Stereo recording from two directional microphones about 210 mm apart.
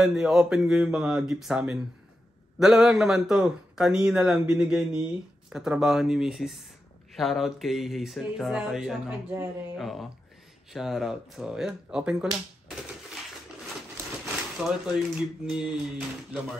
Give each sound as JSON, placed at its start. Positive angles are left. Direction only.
{"t": 0.0, "sound": "speech", "side_deg": -5}
{"t": 14.2, "sound": "speech", "side_deg": -5}